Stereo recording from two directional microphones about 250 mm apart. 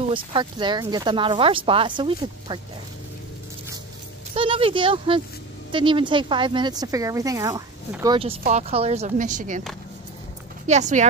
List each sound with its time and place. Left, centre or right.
0.1 s speech: centre
4.3 s a sound: right
5.7 s speech: centre
10.7 s speech: right